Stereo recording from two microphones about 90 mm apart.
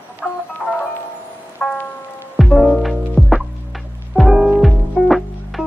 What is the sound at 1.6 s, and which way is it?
Music, 10° left (ahead or behind).